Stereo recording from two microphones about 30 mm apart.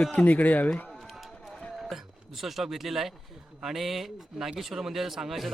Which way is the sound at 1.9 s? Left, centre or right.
Centre.